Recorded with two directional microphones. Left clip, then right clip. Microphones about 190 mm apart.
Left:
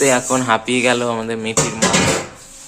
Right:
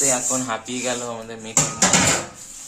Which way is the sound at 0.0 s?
25° left (ahead or behind).